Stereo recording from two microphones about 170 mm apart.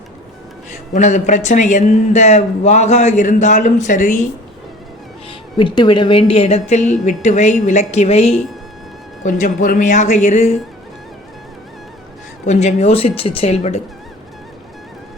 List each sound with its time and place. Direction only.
0.7 s speech: 45° left (ahead or behind)
5.5 s a woman's voice: 30° left (ahead or behind); by 10.6 s 45° left (ahead or behind)
12.5 s a woman's voice: 40° left (ahead or behind)